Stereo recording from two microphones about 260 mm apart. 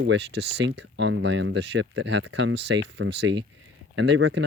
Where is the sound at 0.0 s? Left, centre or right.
Right.